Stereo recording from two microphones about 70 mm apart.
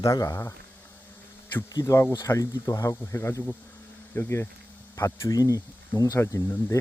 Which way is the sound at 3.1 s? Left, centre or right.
Left.